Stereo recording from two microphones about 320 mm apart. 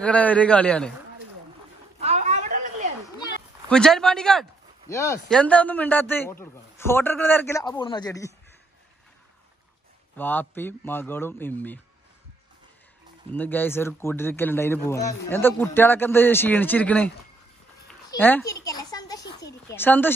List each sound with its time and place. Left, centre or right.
0.0 s a man's voice: centre
2.0 s a sound: centre
3.6 s speech: centre
10.1 s speech: centre
13.3 s speech: centre
18.2 s speech: centre